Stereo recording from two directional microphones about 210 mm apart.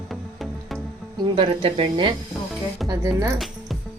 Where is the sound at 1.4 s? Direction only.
25° right (ahead or behind).